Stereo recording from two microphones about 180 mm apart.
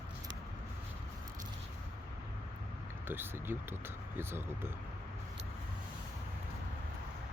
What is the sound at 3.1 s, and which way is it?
Speech, 10° right (ahead or behind).